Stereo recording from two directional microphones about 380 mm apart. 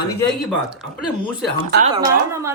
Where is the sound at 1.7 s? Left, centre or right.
Right.